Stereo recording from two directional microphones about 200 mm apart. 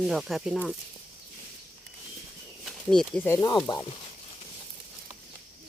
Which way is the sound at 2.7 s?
Centre (ahead or behind).